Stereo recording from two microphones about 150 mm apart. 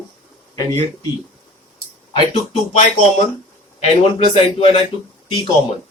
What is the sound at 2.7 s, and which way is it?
Speech, 50° left (ahead or behind).